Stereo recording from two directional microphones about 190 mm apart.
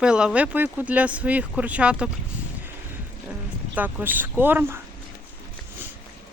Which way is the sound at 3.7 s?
10° right (ahead or behind).